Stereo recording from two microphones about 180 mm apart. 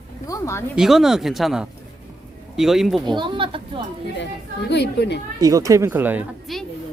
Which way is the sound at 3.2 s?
30° right (ahead or behind).